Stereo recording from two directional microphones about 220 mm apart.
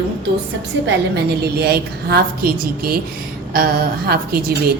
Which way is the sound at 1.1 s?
50° right (ahead or behind).